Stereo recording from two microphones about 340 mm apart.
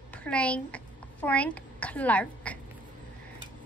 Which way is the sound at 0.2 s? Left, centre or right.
Centre.